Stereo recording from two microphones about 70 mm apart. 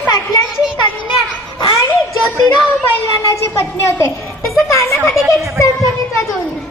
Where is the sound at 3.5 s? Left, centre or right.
Left.